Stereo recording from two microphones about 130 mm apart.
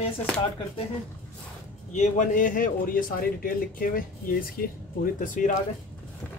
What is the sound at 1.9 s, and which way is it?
A man's voice, 65° left (ahead or behind).